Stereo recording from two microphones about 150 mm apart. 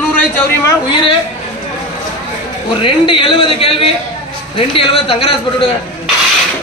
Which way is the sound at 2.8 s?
35° left (ahead or behind).